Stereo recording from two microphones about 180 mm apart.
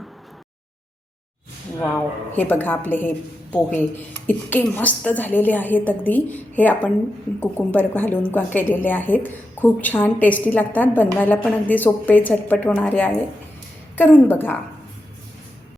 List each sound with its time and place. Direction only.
2.3 s a woman's voice: 10° left (ahead or behind)